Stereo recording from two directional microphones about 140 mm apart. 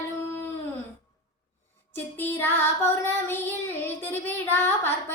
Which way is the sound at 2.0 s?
15° left (ahead or behind).